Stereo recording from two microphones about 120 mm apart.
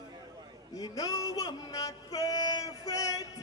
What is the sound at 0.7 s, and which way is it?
Speech, 30° left (ahead or behind).